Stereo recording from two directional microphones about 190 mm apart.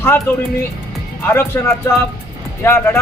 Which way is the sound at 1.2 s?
10° left (ahead or behind).